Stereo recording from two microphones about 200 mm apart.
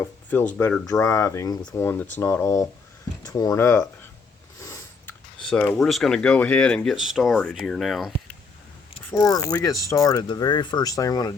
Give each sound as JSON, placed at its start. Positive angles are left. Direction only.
{"t": 0.0, "sound": "speech", "side_deg": 10}
{"t": 4.6, "sound": "a sound", "side_deg": 15}
{"t": 5.4, "sound": "speech", "side_deg": 5}
{"t": 9.0, "sound": "speech", "side_deg": 15}
{"t": 9.9, "sound": "mechanisms", "side_deg": 15}